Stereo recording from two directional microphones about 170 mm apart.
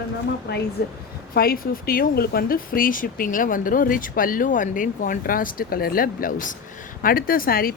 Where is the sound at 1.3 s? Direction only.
60° left (ahead or behind).